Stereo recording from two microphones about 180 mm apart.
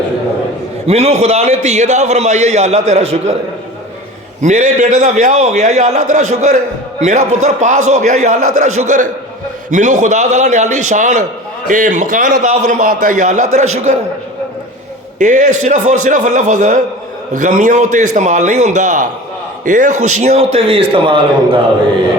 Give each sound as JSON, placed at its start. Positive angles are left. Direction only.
{"t": 0.9, "sound": "a man's voice", "side_deg": -35}
{"t": 4.4, "sound": "a man's voice", "side_deg": -45}
{"t": 15.2, "sound": "a man's voice", "side_deg": -45}